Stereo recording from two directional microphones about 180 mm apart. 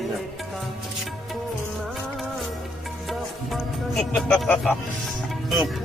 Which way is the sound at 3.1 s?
Centre (ahead or behind).